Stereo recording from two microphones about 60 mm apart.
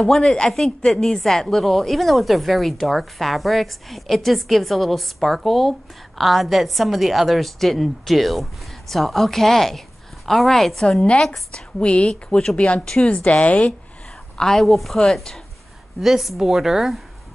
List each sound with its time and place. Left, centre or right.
0.1 s speech: centre
10.8 s a woman's voice: centre
14.3 s speech: centre
16.0 s speech: centre